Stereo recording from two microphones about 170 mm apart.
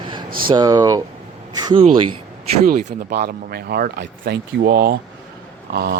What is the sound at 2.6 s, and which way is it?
Speech, 65° right (ahead or behind).